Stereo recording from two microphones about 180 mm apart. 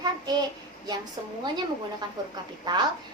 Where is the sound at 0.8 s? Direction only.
25° right (ahead or behind).